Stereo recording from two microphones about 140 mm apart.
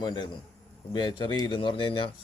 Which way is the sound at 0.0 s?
30° left (ahead or behind).